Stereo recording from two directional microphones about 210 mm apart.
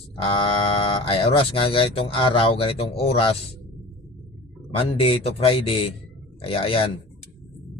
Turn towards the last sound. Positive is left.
turn(degrees=25)  # may be behind; listen again after turning